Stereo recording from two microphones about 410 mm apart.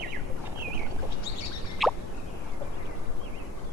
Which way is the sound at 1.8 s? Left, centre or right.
Centre.